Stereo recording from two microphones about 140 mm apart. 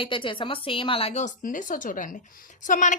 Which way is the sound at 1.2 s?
65° left (ahead or behind).